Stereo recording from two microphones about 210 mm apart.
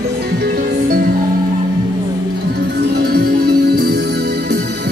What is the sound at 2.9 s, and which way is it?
Music, 45° right (ahead or behind).